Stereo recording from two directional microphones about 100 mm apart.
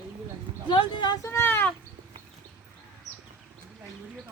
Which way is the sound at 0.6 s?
50° left (ahead or behind).